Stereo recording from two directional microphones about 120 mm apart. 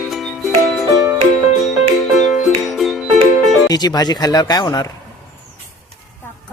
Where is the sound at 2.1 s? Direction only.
Centre (ahead or behind).